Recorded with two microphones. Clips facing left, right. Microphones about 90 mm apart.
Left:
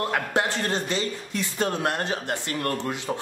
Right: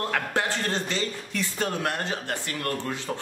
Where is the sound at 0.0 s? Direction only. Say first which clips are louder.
Left 2 dB; 20° left (ahead or behind).